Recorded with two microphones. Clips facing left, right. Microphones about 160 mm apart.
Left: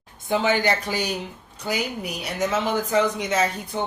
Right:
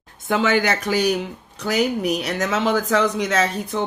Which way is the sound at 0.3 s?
85° right.